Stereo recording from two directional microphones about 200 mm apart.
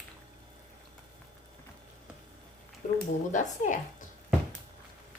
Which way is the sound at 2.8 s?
40° left (ahead or behind).